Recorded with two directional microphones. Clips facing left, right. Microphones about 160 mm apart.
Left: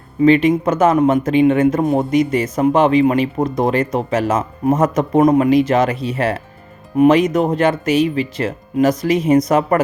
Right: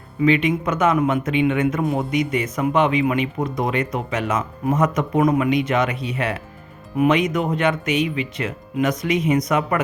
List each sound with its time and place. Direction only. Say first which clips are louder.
0.2 s speech: left 6 dB; 35° left (ahead or behind)
7.3 s speech: left 5 dB; 40° left (ahead or behind)